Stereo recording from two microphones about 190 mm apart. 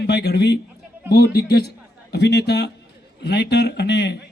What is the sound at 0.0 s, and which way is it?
A man's voice, 60° left (ahead or behind).